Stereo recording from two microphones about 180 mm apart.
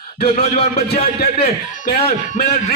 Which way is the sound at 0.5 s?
35° left (ahead or behind).